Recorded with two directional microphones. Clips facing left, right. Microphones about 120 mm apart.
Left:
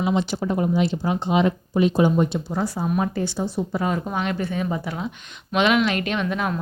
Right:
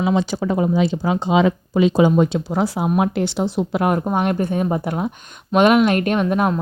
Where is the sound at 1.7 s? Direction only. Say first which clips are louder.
Right 4 dB; 90° right; by 4.0 s 65° right (ahead or behind).